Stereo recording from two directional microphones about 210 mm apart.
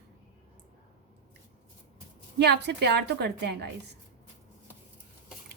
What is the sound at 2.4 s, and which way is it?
A woman's voice, 55° right (ahead or behind).